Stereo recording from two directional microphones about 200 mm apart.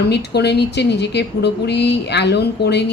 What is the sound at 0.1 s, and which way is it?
A woman's voice, 55° left (ahead or behind).